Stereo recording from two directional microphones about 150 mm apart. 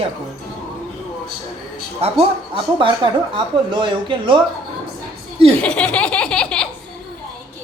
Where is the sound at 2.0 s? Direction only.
40° right (ahead or behind).